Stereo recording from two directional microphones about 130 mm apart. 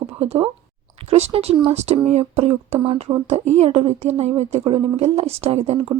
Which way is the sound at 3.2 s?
60° right (ahead or behind).